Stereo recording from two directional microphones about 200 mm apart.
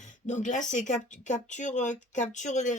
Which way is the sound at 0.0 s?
35° left (ahead or behind).